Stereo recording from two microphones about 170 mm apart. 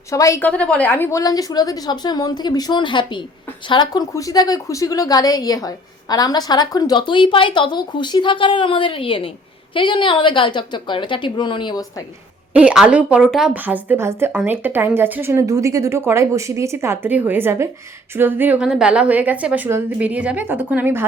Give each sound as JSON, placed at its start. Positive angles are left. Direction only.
{"t": 0.1, "sound": "a woman's voice", "side_deg": 20}
{"t": 12.5, "sound": "speech", "side_deg": -5}